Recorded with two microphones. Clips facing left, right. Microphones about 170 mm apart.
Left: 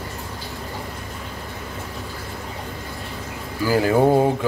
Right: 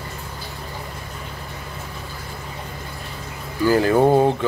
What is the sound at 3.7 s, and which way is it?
Speech, 5° left (ahead or behind).